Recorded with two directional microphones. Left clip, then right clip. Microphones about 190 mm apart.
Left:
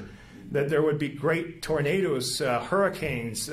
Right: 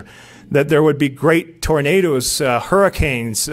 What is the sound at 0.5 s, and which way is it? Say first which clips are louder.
Speech: right 11 dB; 60° right (ahead or behind).